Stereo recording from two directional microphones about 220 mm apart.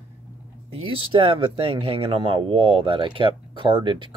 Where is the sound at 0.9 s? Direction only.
25° right (ahead or behind).